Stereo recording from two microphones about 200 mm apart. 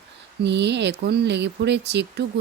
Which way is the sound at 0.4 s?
60° right (ahead or behind).